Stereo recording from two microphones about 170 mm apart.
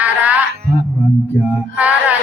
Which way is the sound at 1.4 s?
10° right (ahead or behind).